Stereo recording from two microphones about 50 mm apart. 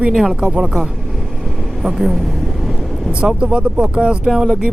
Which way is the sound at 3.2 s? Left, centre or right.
Centre.